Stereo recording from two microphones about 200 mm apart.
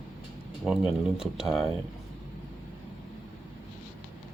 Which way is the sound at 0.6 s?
5° right (ahead or behind).